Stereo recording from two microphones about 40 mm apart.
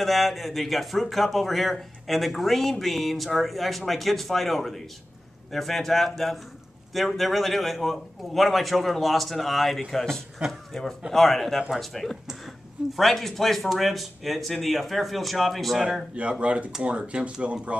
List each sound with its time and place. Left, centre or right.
0.0 s a man's voice: centre
16.2 s speech: right